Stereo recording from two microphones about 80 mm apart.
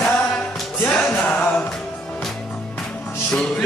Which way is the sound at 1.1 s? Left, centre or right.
Centre.